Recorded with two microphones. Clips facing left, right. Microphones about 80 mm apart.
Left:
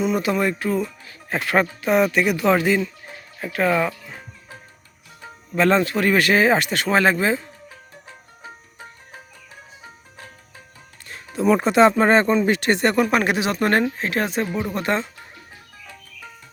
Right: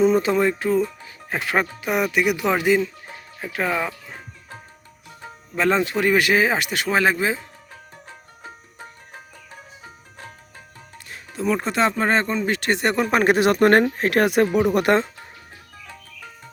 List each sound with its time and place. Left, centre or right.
0.0 s speech: right; by 3.9 s centre
5.5 s speech: centre
11.3 s speech: centre
12.8 s speech: right
13.1 s speech: right